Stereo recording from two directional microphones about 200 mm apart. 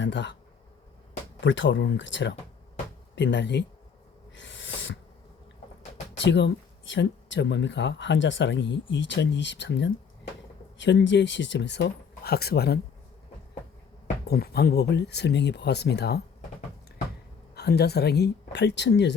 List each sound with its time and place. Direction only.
0.0 s speech: 60° left (ahead or behind)
1.4 s speech: 70° left (ahead or behind)
4.4 s owl: 65° left (ahead or behind)
6.1 s speech: 60° left (ahead or behind)
14.3 s speech: 50° left (ahead or behind)
17.5 s speech: 55° left (ahead or behind)